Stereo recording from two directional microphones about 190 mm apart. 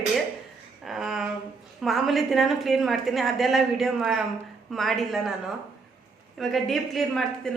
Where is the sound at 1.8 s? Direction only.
Centre (ahead or behind).